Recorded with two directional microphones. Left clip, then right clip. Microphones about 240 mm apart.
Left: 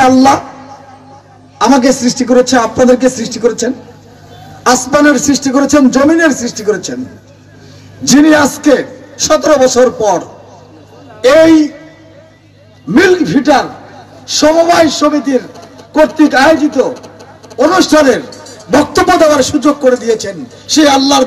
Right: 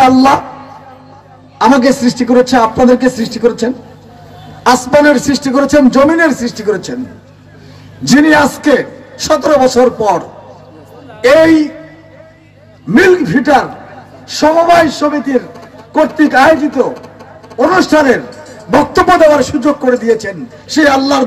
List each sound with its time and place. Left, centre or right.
1.6 s a man's voice: right
8.0 s a man's voice: right
12.9 s a man's voice: right